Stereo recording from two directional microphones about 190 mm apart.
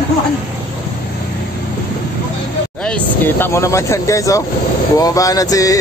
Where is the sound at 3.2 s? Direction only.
10° left (ahead or behind).